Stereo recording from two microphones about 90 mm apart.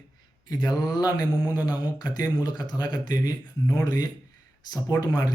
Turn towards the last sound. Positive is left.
turn(degrees=45)  # may be behind; listen again after turning